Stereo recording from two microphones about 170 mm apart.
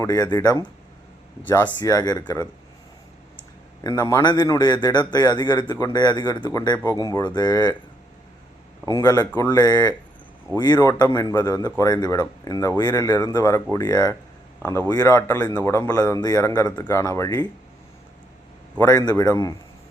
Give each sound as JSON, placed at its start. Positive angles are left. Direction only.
{"t": 0.0, "sound": "speech", "side_deg": 20}
{"t": 1.4, "sound": "speech", "side_deg": 10}
{"t": 1.8, "sound": "speech", "side_deg": 20}
{"t": 3.8, "sound": "speech", "side_deg": 20}
{"t": 8.9, "sound": "speech", "side_deg": 20}
{"t": 18.8, "sound": "speech", "side_deg": 20}